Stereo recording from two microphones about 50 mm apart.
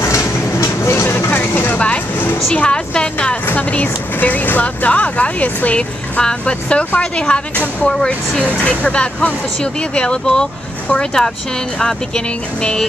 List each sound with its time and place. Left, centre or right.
0.0 s vehicle: left
1.3 s vehicle: left
2.5 s speech: left
3.5 s speech: left; by 11.3 s centre